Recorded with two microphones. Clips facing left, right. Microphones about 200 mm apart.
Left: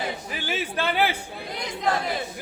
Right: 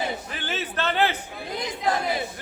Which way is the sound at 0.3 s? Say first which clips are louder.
Left 1 dB; 10° left (ahead or behind).